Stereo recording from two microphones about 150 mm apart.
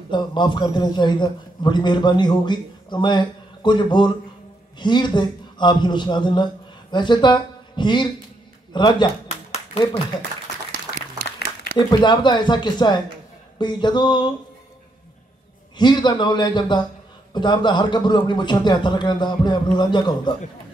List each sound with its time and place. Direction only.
0.1 s a man's voice: 30° left (ahead or behind)
10.1 s a man's voice: 25° left (ahead or behind)
11.2 s a sound: 90° left
11.9 s a man's voice: 30° left (ahead or behind)
15.8 s a man's voice: 30° left (ahead or behind)